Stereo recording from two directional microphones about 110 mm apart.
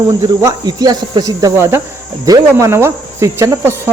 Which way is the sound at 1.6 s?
20° right (ahead or behind).